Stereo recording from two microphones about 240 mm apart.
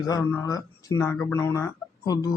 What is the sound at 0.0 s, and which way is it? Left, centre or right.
Speech, centre.